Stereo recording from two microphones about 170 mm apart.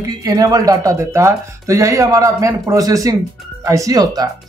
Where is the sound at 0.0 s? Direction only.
20° right (ahead or behind).